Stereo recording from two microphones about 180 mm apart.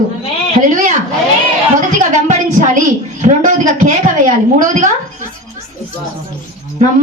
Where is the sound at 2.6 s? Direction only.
40° right (ahead or behind).